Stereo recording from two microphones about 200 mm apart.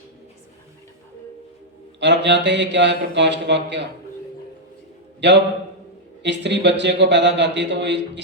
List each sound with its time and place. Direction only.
2.0 s a man's voice: 60° right (ahead or behind)
5.2 s a man's voice: 60° right (ahead or behind)